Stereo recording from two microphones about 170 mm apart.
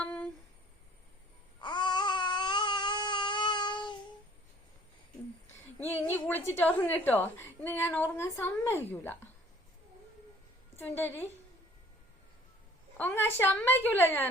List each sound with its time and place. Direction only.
0.0 s a sound: 10° left (ahead or behind)
1.6 s baby cry: 25° left (ahead or behind)
6.1 s a sound: 10° left (ahead or behind)
6.6 s a woman's voice: 10° left (ahead or behind)
10.8 s a woman's voice: 10° left (ahead or behind)
13.0 s a woman's voice: 10° left (ahead or behind)